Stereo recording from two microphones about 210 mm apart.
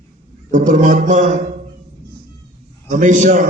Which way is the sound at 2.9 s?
35° right (ahead or behind).